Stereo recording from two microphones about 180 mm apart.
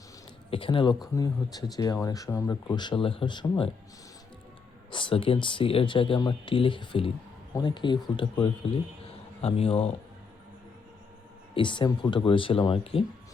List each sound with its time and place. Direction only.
0.5 s speech: 30° left (ahead or behind)
4.9 s speech: 25° left (ahead or behind)
11.5 s speech: 25° left (ahead or behind)